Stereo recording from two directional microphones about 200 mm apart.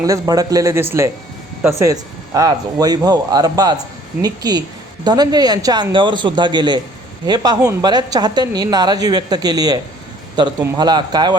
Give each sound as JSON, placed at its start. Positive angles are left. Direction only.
{"t": 0.0, "sound": "a woman's voice", "side_deg": -20}